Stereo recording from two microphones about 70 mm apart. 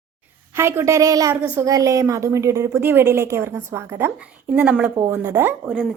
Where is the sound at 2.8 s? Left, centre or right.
Right.